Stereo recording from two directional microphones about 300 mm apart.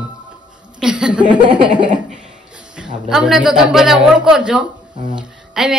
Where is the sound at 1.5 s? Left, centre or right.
Centre.